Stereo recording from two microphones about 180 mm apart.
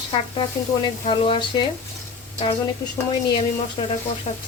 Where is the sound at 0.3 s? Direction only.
25° left (ahead or behind).